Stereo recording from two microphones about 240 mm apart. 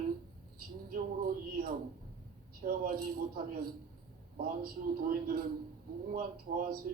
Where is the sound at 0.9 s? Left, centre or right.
Right.